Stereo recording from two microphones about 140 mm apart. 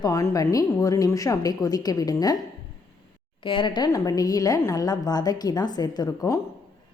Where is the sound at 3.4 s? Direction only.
35° left (ahead or behind).